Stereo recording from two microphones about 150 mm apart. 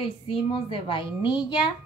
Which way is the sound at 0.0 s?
35° left (ahead or behind).